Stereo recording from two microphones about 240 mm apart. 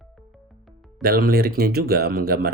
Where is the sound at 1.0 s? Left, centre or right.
Right.